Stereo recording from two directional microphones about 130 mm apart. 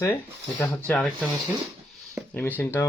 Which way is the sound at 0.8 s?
5° left (ahead or behind).